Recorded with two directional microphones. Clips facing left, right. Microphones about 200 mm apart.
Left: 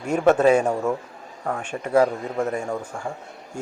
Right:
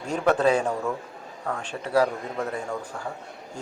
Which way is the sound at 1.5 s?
25° left (ahead or behind).